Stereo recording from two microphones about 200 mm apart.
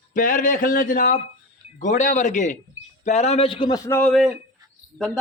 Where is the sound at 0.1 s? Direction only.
40° left (ahead or behind).